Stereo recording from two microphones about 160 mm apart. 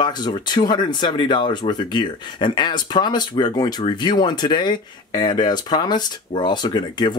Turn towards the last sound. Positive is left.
turn(degrees=25)  # may be behind; listen again after turning